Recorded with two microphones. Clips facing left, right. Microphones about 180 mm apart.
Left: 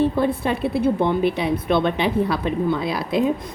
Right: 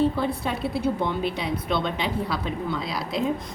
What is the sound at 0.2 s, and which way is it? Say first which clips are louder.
A woman's voice: left 6 dB; 55° left (ahead or behind).